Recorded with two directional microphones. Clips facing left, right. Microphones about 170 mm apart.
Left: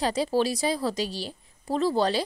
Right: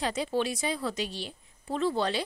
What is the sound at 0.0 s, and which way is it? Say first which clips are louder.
Speech: left 5 dB; 35° left (ahead or behind).